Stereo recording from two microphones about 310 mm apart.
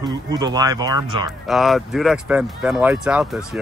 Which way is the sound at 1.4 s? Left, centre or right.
Centre.